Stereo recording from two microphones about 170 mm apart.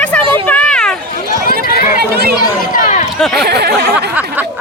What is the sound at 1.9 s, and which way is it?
Chatter, 70° right (ahead or behind).